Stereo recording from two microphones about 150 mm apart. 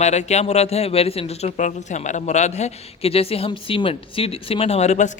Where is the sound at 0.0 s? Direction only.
50° left (ahead or behind).